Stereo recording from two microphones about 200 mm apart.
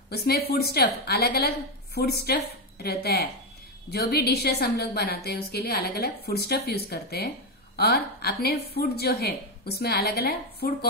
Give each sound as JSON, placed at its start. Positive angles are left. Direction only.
{"t": 0.1, "sound": "a woman's voice", "side_deg": 50}